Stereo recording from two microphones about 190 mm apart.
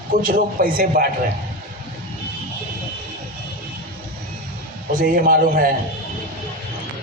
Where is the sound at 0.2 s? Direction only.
45° right (ahead or behind).